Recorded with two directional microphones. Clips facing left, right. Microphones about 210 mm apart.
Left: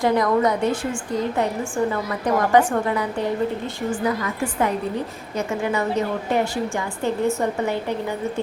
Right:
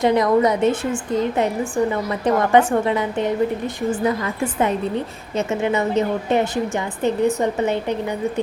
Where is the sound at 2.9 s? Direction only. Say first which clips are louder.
Right 3 dB; 20° right (ahead or behind).